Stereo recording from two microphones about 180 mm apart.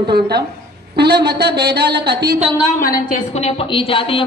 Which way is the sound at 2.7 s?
50° left (ahead or behind).